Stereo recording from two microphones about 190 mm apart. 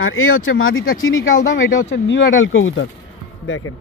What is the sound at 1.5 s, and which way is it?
Speech, 70° left (ahead or behind).